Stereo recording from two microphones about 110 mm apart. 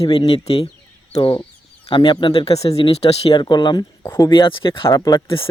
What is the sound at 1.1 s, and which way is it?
Speech, 50° left (ahead or behind).